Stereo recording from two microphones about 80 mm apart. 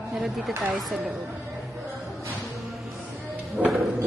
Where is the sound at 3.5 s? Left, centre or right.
Centre.